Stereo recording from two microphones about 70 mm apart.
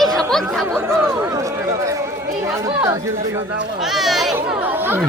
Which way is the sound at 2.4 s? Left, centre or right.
Right.